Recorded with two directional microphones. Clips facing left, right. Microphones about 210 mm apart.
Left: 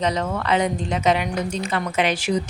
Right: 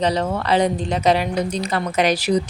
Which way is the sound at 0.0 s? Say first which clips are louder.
Right 3 dB; 30° right (ahead or behind).